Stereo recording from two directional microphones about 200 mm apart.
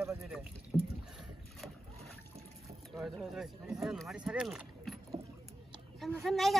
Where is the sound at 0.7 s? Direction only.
5° left (ahead or behind).